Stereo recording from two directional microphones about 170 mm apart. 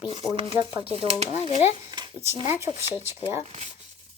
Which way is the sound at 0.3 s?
30° right (ahead or behind).